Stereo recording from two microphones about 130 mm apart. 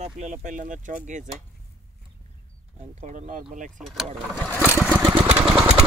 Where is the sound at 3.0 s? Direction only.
70° right (ahead or behind).